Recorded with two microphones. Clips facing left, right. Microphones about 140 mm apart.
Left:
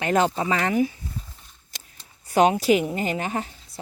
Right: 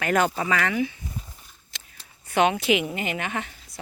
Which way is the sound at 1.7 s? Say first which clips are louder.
Even; 45° left (ahead or behind).